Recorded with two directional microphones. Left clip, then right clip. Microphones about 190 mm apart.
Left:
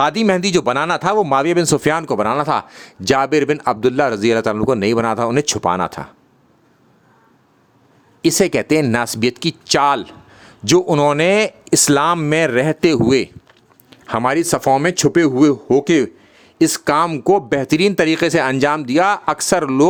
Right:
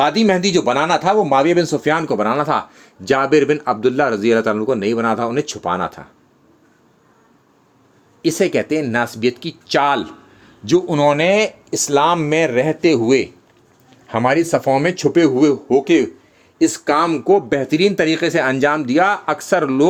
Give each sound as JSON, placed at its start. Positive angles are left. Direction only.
{"t": 0.0, "sound": "speech", "side_deg": 45}
{"t": 8.2, "sound": "speech", "side_deg": 35}